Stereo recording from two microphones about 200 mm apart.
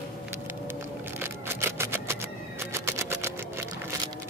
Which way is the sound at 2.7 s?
15° right (ahead or behind).